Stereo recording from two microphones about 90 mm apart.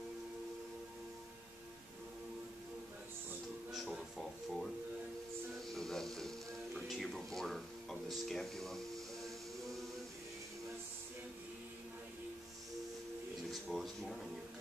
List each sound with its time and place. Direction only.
3.7 s a sound: 5° right (ahead or behind)
5.8 s music: 5° left (ahead or behind)
13.5 s speech: centre (ahead or behind)